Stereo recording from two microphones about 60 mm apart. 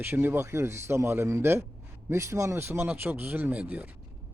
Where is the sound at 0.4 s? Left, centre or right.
Right.